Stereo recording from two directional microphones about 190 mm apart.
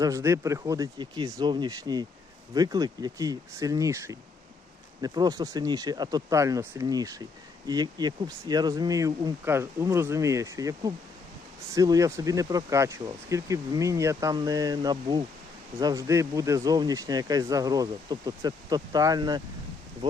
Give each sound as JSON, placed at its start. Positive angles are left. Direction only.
{"t": 0.0, "sound": "speech", "side_deg": -15}